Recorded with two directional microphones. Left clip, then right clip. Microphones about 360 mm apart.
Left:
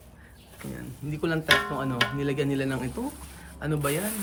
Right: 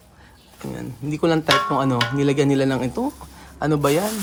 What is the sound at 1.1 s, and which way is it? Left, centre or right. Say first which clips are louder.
Speech: right 6 dB; centre.